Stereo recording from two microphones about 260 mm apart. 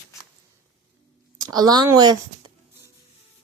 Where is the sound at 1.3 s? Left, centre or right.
Centre.